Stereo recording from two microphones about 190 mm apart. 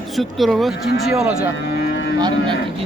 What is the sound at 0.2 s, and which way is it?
A man's voice, centre (ahead or behind).